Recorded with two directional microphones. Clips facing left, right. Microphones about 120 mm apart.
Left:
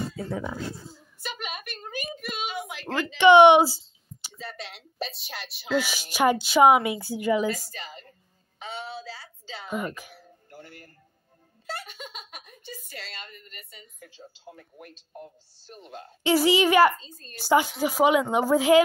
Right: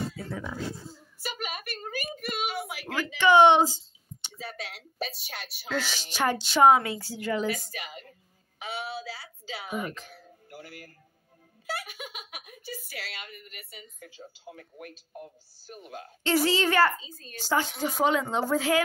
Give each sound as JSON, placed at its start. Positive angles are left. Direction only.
{"t": 0.3, "sound": "speech", "side_deg": 15}
{"t": 1.2, "sound": "a sound", "side_deg": -5}
{"t": 3.2, "sound": "a sound", "side_deg": 20}
{"t": 4.3, "sound": "speech", "side_deg": -5}
{"t": 5.8, "sound": "speech", "side_deg": 10}
{"t": 7.7, "sound": "a woman's voice", "side_deg": -10}
{"t": 9.9, "sound": "speech", "side_deg": 10}
{"t": 10.5, "sound": "speech", "side_deg": -5}
{"t": 16.3, "sound": "speech", "side_deg": 15}
{"t": 16.9, "sound": "speech", "side_deg": -5}
{"t": 17.4, "sound": "speech", "side_deg": 15}